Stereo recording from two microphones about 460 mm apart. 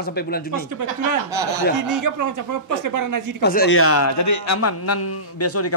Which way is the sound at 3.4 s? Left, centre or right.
Left.